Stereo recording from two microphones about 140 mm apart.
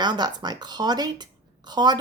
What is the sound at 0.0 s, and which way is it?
A woman's voice, 30° right (ahead or behind).